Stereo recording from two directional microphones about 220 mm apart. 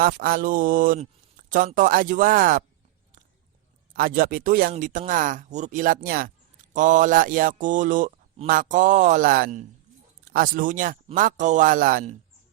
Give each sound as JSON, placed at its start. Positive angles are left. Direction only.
{"t": 0.0, "sound": "a man's voice", "side_deg": -40}
{"t": 3.9, "sound": "a man's voice", "side_deg": -40}